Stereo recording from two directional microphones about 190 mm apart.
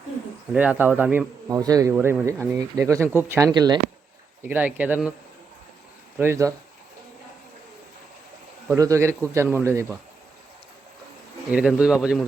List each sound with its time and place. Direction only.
0.5 s speech: 5° right (ahead or behind)
4.4 s speech: 10° right (ahead or behind)
6.1 s speech: 15° right (ahead or behind)
8.6 s speech: 15° right (ahead or behind)
11.5 s speech: 5° right (ahead or behind)